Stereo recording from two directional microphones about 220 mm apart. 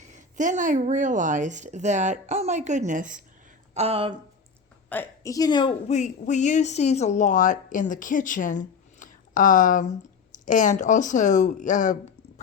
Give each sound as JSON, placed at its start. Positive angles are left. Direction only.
{"t": 0.0, "sound": "speech", "side_deg": -35}
{"t": 3.8, "sound": "speech", "side_deg": -25}
{"t": 4.9, "sound": "speech", "side_deg": 10}